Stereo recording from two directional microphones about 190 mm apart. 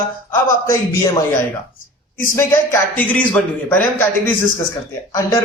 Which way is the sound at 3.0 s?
10° left (ahead or behind).